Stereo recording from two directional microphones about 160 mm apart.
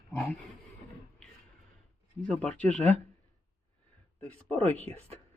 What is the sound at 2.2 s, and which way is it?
Speech, 5° left (ahead or behind).